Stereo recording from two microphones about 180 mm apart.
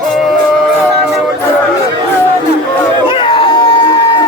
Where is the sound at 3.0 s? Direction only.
30° left (ahead or behind).